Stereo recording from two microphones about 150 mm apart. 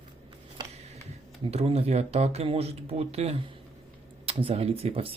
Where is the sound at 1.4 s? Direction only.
45° right (ahead or behind).